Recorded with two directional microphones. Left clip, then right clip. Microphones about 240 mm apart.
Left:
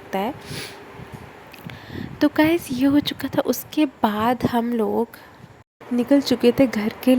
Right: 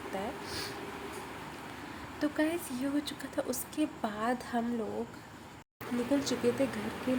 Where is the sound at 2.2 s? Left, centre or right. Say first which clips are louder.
Left 14 dB; left.